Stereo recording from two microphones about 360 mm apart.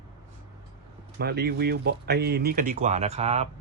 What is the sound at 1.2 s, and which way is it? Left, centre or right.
Speech, right.